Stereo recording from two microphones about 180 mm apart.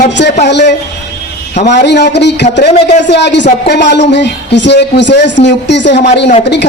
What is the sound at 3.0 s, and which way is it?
A man's voice, 75° left (ahead or behind).